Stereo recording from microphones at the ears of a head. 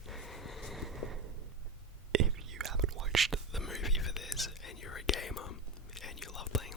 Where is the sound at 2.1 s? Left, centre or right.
Right.